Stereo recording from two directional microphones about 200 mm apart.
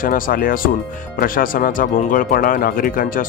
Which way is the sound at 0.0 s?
45° left (ahead or behind).